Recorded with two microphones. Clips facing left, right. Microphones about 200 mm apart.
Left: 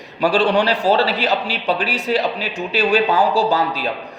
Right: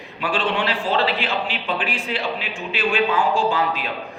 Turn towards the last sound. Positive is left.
turn(degrees=35)  # may be behind; listen again after turning